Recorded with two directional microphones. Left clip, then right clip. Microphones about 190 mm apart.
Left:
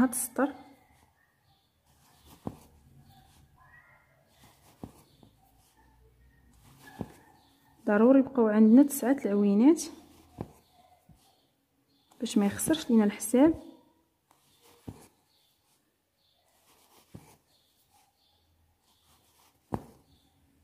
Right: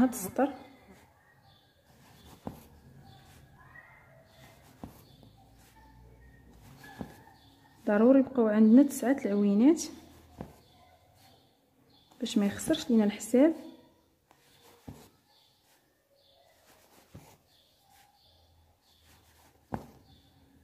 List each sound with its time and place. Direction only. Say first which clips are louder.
0.4 s a woman's voice: even; 25° left (ahead or behind)
7.8 s a woman's voice: left 1 dB; 25° left (ahead or behind)
12.2 s a woman's voice: left 2 dB; 25° left (ahead or behind)